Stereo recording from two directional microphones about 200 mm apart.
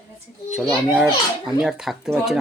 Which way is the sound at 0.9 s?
5° right (ahead or behind).